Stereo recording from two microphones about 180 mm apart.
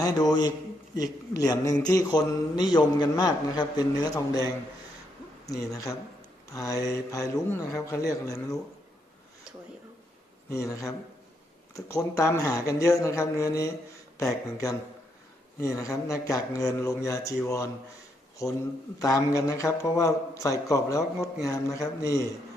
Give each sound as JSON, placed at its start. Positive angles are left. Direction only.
{"t": 0.0, "sound": "a man's voice", "side_deg": 20}
{"t": 10.5, "sound": "speech", "side_deg": 15}
{"t": 15.6, "sound": "speech", "side_deg": 15}